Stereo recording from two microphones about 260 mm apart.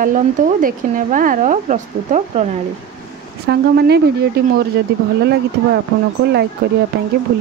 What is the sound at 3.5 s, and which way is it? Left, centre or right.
Speech, right.